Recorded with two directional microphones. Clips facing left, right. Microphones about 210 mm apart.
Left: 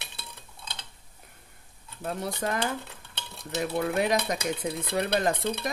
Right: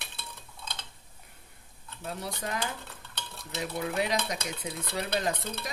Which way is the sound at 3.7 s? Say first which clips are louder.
Left 4 dB; 55° left (ahead or behind).